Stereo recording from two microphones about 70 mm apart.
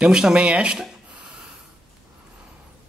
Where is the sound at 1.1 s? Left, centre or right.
Centre.